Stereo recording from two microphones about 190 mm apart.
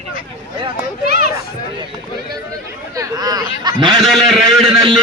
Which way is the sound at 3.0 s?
20° right (ahead or behind).